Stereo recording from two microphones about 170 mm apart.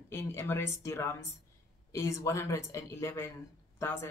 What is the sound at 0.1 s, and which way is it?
Speech, 15° left (ahead or behind).